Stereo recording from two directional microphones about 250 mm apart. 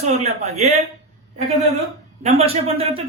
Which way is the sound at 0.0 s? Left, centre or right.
Right.